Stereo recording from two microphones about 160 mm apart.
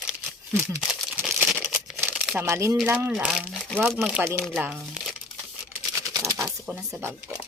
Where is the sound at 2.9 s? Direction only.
10° right (ahead or behind).